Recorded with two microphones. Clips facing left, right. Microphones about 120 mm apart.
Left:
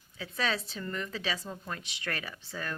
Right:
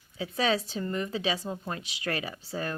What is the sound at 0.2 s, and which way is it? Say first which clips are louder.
Speech: right 6 dB; 30° right (ahead or behind).